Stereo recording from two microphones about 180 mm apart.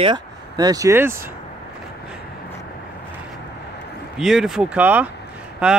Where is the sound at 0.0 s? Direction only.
25° right (ahead or behind).